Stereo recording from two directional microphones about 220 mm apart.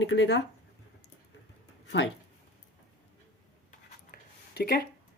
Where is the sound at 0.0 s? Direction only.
60° left (ahead or behind).